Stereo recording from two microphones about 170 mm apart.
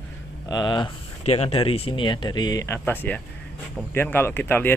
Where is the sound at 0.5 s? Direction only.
25° left (ahead or behind).